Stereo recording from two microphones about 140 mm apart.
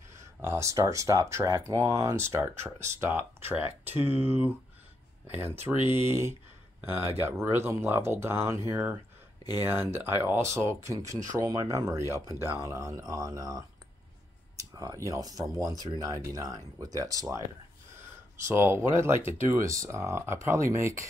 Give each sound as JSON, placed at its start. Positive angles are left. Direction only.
{"t": 0.2, "sound": "speech", "side_deg": -20}
{"t": 18.4, "sound": "speech", "side_deg": -20}